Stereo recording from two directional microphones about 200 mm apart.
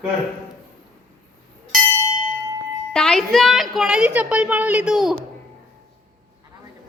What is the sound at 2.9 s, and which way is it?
A woman's voice, centre (ahead or behind).